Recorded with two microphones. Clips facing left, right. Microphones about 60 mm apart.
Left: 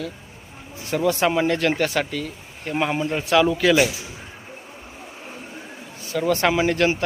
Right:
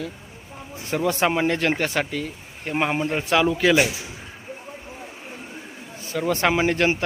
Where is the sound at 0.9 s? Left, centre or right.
Right.